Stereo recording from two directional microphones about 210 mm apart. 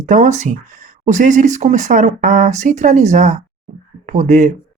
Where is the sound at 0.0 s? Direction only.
35° right (ahead or behind).